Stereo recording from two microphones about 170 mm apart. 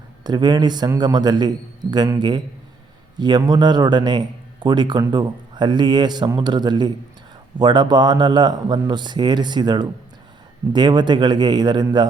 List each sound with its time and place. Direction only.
0.3 s speech: 25° right (ahead or behind)